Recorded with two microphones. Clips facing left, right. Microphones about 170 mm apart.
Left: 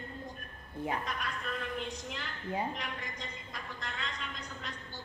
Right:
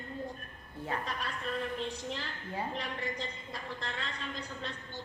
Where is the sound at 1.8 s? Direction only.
30° right (ahead or behind).